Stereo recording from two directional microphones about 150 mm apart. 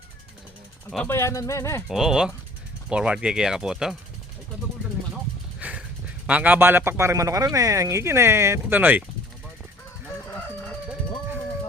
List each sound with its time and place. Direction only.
0.9 s speech: 10° left (ahead or behind)
1.9 s speech: centre (ahead or behind)
5.5 s a sound: 10° right (ahead or behind)
6.2 s speech: 10° right (ahead or behind)